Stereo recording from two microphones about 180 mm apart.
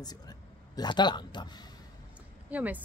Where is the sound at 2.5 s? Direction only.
10° right (ahead or behind).